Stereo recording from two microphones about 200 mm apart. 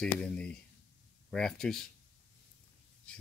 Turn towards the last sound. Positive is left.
turn(degrees=5)  # may be behind; listen again after turning